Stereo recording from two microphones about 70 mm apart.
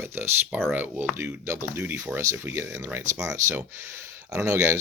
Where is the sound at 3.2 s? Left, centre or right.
Right.